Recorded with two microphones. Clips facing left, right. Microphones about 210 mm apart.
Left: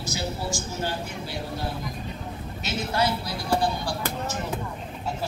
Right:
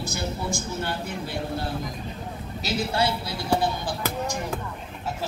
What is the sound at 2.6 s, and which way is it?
A woman's voice, 30° right (ahead or behind).